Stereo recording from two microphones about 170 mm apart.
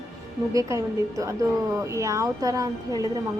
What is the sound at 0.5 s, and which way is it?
Speech, 20° right (ahead or behind).